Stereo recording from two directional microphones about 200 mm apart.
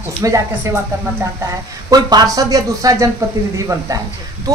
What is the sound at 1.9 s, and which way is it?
Speech, 20° right (ahead or behind).